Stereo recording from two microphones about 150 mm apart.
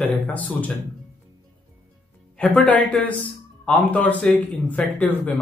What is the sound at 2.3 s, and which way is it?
A man's voice, 10° left (ahead or behind).